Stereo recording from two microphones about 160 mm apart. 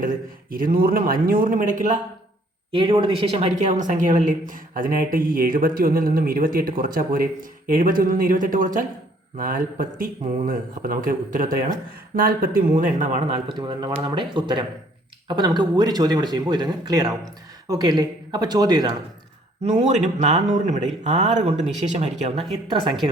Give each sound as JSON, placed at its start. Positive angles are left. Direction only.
{"t": 0.5, "sound": "speech", "side_deg": -65}
{"t": 2.7, "sound": "a woman's voice", "side_deg": -30}
{"t": 13.6, "sound": "speech", "side_deg": -25}
{"t": 19.6, "sound": "speech", "side_deg": -45}
{"t": 22.7, "sound": "speech", "side_deg": -30}